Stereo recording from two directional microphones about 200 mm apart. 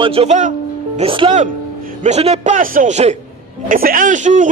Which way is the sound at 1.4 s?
35° right (ahead or behind).